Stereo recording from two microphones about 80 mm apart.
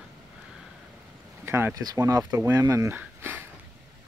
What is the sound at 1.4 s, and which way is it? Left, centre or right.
Speech, right.